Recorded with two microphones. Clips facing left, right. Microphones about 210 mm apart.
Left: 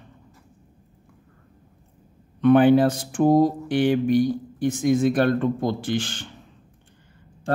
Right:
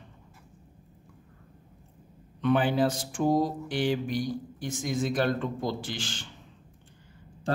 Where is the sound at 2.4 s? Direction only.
55° left (ahead or behind).